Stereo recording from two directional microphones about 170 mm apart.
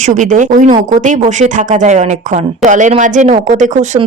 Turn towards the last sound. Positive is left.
turn(degrees=-45)  # may be behind; listen again after turning